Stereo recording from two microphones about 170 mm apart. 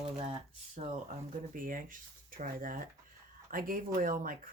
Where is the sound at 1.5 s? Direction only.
55° right (ahead or behind).